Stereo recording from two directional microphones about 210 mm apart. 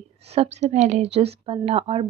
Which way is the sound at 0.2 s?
30° right (ahead or behind).